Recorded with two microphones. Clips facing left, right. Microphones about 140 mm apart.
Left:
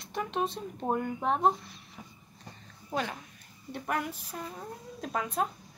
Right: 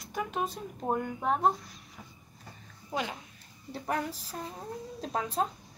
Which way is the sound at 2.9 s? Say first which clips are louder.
Left 1 dB; 15° right (ahead or behind).